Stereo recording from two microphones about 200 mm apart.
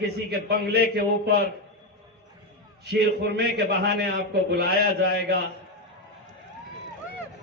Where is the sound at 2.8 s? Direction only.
55° right (ahead or behind).